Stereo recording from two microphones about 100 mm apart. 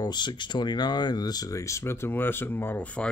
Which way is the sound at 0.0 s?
45° left (ahead or behind).